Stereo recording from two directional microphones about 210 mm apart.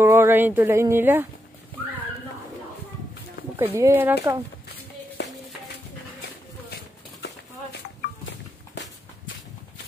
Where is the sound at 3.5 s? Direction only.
10° right (ahead or behind).